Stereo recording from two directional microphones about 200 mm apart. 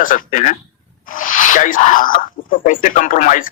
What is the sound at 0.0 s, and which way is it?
Speech, 40° left (ahead or behind).